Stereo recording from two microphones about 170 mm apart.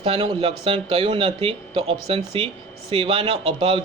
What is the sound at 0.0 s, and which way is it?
A man's voice, 35° right (ahead or behind).